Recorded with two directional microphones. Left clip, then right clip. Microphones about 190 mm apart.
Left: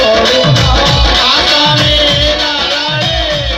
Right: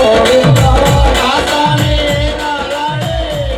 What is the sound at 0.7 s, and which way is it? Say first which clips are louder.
Music: left 1 dB; 80° right.